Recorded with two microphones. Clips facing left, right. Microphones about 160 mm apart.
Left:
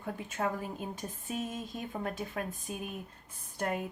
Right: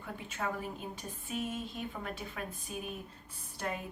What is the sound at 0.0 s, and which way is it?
A woman's voice, 40° left (ahead or behind).